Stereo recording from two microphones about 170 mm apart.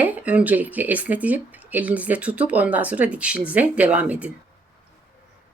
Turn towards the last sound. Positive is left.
turn(degrees=-10)  # may be behind; listen again after turning